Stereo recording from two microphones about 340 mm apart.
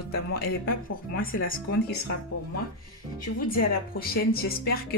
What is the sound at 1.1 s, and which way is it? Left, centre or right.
Speech, left.